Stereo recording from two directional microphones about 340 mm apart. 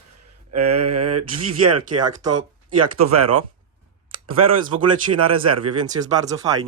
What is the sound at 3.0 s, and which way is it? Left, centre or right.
Speech, right.